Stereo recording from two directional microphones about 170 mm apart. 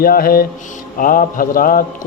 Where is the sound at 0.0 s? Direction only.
60° left (ahead or behind).